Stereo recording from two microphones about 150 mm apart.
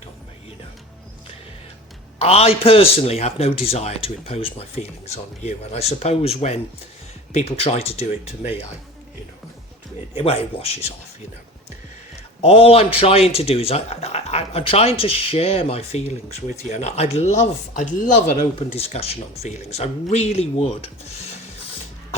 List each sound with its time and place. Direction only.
2.1 s speech: 40° left (ahead or behind)
10.2 s a man's voice: 40° left (ahead or behind)
12.4 s a man's voice: 40° left (ahead or behind)